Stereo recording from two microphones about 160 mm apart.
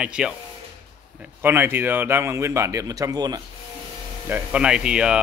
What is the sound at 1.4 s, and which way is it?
Speech, 15° right (ahead or behind).